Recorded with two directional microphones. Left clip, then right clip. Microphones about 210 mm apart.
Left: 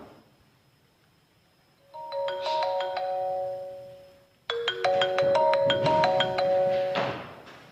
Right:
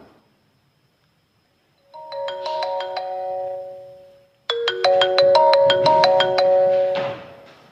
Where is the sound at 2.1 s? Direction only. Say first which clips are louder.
Right 3 dB; 30° right (ahead or behind).